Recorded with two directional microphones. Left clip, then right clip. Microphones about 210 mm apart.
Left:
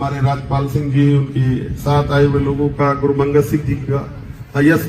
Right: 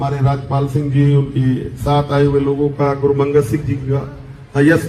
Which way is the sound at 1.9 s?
45° left (ahead or behind).